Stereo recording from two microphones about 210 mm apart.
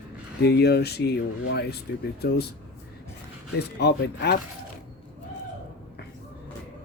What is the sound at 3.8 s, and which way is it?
Speech, 50° left (ahead or behind).